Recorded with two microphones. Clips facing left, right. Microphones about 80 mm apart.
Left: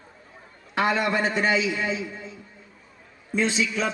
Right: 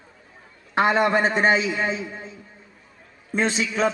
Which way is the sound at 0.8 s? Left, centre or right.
Right.